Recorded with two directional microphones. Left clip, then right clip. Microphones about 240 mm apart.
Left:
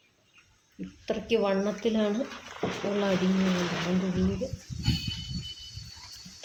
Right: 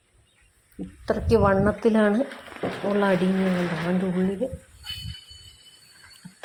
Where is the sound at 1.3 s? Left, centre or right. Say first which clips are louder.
Right 7 dB; right.